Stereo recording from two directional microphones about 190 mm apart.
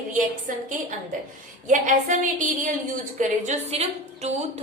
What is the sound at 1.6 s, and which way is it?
A woman's voice, 45° right (ahead or behind).